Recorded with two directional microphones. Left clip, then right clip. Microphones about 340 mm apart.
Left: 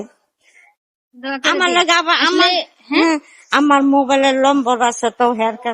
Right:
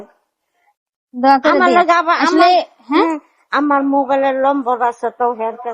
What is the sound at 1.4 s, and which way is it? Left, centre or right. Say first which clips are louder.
Speech: right 3 dB; left.